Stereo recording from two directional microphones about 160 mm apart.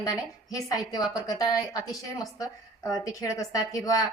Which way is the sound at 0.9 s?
25° left (ahead or behind).